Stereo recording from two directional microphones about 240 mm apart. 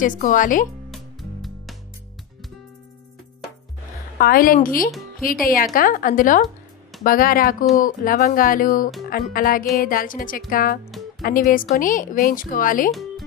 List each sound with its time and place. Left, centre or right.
0.0 s speech: left
0.9 s music: centre
4.2 s speech: left
10.9 s music: centre
11.2 s speech: left